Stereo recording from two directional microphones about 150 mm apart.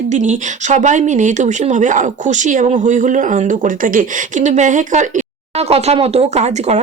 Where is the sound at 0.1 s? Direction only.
55° right (ahead or behind).